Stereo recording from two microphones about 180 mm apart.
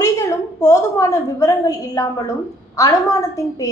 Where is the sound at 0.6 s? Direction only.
15° left (ahead or behind).